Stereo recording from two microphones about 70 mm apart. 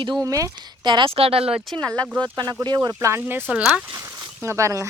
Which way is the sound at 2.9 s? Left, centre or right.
Right.